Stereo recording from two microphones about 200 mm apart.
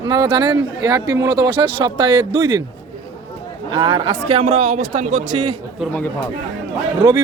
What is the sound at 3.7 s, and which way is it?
A man's voice, 25° right (ahead or behind).